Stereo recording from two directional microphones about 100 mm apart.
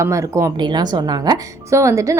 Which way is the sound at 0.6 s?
45° right (ahead or behind).